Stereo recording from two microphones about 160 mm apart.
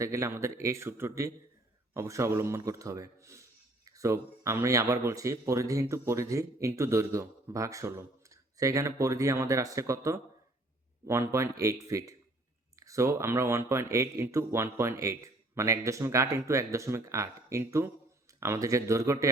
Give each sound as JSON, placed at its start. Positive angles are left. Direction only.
{"t": 0.0, "sound": "a man's voice", "side_deg": -15}